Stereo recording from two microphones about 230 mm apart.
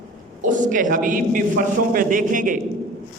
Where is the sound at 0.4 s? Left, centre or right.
Right.